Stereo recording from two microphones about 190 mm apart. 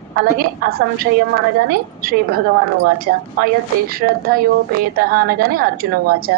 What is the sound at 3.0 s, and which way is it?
A woman's voice, 50° right (ahead or behind).